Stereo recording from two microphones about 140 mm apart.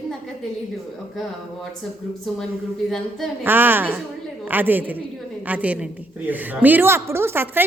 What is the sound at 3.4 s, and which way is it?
A woman's voice, 15° right (ahead or behind).